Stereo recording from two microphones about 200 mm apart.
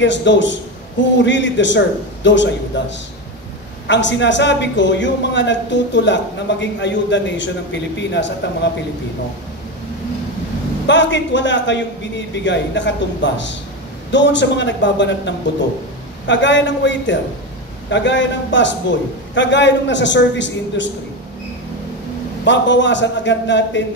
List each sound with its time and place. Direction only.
0.0 s a man's voice: 65° left (ahead or behind)
10.9 s a man's voice: 65° left (ahead or behind)
22.4 s a man's voice: 65° left (ahead or behind)